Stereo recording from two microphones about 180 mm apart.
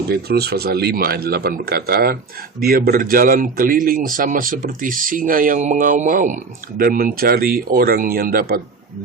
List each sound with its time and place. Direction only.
0.1 s a man's voice: 60° right (ahead or behind)